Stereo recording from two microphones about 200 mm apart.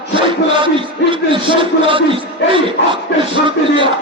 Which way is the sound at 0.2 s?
25° right (ahead or behind).